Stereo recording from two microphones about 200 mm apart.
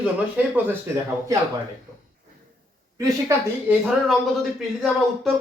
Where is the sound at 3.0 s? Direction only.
15° right (ahead or behind).